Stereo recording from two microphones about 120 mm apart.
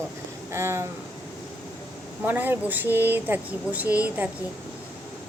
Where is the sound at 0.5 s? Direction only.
20° right (ahead or behind).